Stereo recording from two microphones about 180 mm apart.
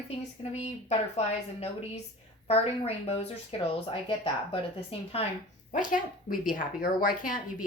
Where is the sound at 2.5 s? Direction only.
35° left (ahead or behind).